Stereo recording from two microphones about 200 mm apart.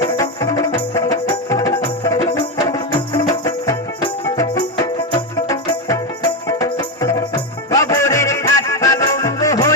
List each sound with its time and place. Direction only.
0.0 s music: 15° left (ahead or behind)